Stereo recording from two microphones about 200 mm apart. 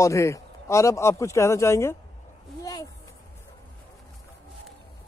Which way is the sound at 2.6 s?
15° left (ahead or behind).